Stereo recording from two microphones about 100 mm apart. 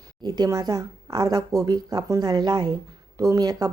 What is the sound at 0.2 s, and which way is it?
Speech, 45° right (ahead or behind).